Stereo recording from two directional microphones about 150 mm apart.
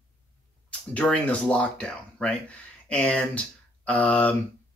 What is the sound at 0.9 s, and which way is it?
Speech, 10° left (ahead or behind).